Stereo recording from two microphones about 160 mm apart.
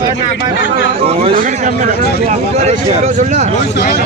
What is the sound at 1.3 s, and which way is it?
Speech, 60° right (ahead or behind).